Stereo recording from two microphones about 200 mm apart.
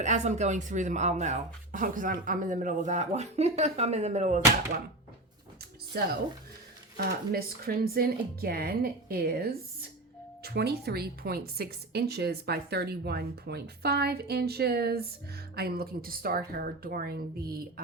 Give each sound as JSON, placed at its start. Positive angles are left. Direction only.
{"t": 0.0, "sound": "speech", "side_deg": -35}
{"t": 6.9, "sound": "a woman's voice", "side_deg": -50}